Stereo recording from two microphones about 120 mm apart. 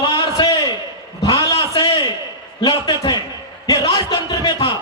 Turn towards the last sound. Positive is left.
turn(degrees=35)  # may be behind; listen again after turning